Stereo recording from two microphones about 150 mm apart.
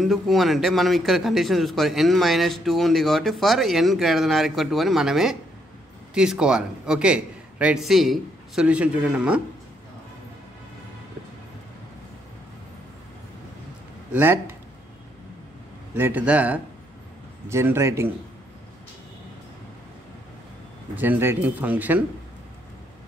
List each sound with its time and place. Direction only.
0.0 s a man's voice: centre (ahead or behind)
14.1 s a man's voice: 15° right (ahead or behind)
15.9 s a man's voice: 10° right (ahead or behind)
20.9 s a man's voice: 10° right (ahead or behind)